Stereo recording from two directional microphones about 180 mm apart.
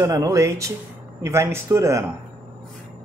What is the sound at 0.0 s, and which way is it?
Speech, 20° right (ahead or behind).